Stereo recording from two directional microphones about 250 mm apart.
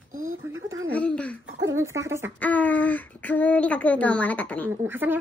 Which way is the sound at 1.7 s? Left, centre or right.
Centre.